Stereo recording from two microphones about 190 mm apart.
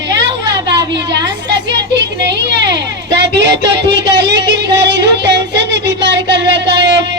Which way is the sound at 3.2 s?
65° right (ahead or behind).